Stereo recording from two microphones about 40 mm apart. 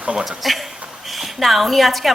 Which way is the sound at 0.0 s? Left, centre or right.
Right.